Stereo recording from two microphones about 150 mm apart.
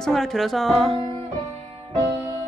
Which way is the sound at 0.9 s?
40° right (ahead or behind).